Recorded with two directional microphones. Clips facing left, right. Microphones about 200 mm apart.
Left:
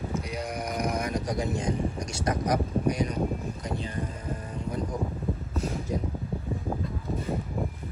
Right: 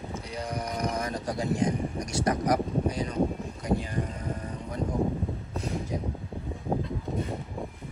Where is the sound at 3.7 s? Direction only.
25° right (ahead or behind).